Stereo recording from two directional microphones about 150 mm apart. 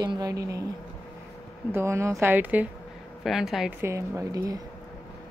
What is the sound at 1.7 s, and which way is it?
A woman's voice, 20° right (ahead or behind).